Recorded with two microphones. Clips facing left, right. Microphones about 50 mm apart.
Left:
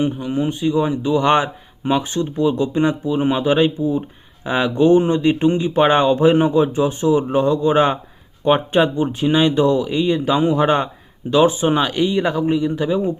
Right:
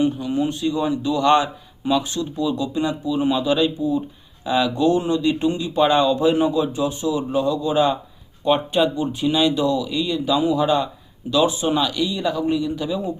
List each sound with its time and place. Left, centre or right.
0.0 s a man's voice: left